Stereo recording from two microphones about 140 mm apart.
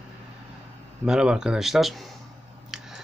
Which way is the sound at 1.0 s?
5° right (ahead or behind).